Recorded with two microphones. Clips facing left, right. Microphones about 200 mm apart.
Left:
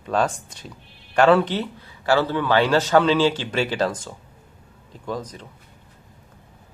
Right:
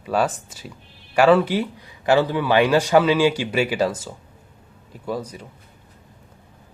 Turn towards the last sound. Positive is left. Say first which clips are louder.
# right 2 dB
turn(degrees=-10)  # may be behind; listen again after turning